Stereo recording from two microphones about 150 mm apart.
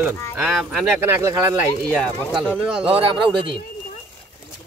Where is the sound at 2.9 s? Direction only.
35° right (ahead or behind).